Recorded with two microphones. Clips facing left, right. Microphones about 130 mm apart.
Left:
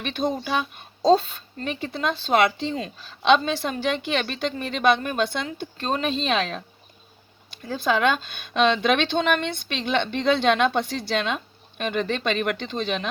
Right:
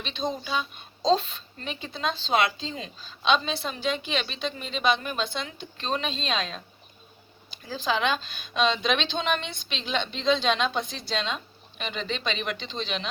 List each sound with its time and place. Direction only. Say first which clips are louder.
0.0 s a woman's voice: left 5 dB; 60° left (ahead or behind)
1.1 s a woman's voice: left 4 dB; 45° left (ahead or behind); by 2.7 s 60° left (ahead or behind)
2.7 s speech: left 7 dB; 45° left (ahead or behind)
3.2 s a woman's voice: left 5 dB; 65° left (ahead or behind)
5.5 s speech: left 4 dB; 45° left (ahead or behind)
7.7 s a woman's voice: left 5 dB; 55° left (ahead or behind)